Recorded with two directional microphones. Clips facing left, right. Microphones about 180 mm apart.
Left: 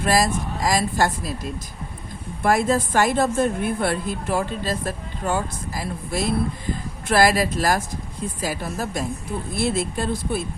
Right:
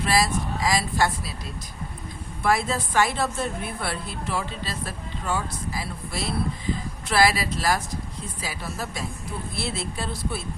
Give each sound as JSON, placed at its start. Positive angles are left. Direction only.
{"t": 0.0, "sound": "a woman's voice", "side_deg": 45}
{"t": 2.4, "sound": "a woman's voice", "side_deg": 50}